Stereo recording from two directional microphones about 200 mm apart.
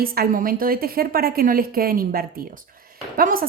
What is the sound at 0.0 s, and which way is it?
A woman's voice, 50° right (ahead or behind).